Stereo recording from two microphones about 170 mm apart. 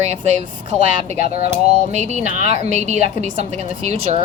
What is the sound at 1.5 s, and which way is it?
Speech, 45° right (ahead or behind).